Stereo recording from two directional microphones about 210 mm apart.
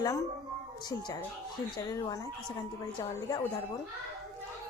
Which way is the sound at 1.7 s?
20° left (ahead or behind).